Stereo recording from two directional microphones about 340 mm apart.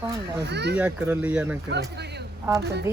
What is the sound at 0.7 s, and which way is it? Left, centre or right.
Speech, centre.